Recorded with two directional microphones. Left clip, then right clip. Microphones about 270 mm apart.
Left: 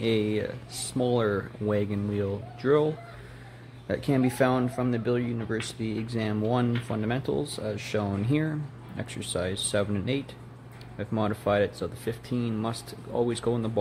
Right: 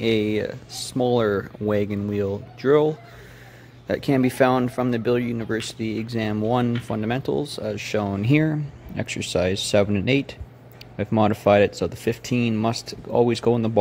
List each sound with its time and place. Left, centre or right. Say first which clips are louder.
0.0 s speech: right 5 dB; right